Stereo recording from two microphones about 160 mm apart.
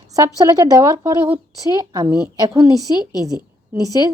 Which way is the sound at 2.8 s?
25° left (ahead or behind).